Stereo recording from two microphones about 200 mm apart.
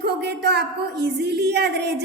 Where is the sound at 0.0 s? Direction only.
55° right (ahead or behind).